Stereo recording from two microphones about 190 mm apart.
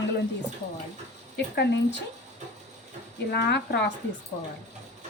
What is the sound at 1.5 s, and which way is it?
Speech, 65° left (ahead or behind).